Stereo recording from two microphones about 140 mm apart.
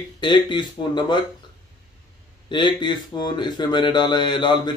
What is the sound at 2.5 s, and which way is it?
Speech, 35° left (ahead or behind).